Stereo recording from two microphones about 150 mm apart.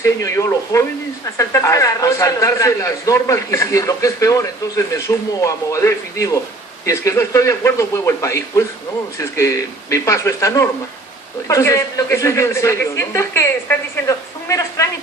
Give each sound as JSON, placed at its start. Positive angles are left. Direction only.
{"t": 0.0, "sound": "a man's voice", "side_deg": 20}